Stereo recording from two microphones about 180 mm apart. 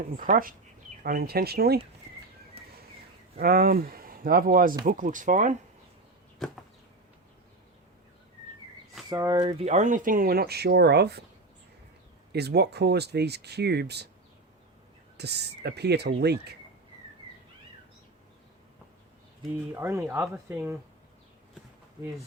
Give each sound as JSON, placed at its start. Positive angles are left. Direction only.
{"t": 0.2, "sound": "speech", "side_deg": -50}
{"t": 3.3, "sound": "speech", "side_deg": -55}
{"t": 6.4, "sound": "a sound", "side_deg": 0}
{"t": 9.0, "sound": "speech", "side_deg": -20}
{"t": 9.6, "sound": "speech", "side_deg": -40}
{"t": 12.3, "sound": "speech", "side_deg": -65}
{"t": 15.2, "sound": "speech", "side_deg": -65}
{"t": 19.7, "sound": "speech", "side_deg": -15}